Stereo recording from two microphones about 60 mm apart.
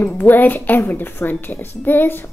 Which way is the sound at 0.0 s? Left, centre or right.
Left.